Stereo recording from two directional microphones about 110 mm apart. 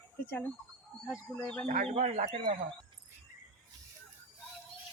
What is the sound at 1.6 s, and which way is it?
Speech, 90° right.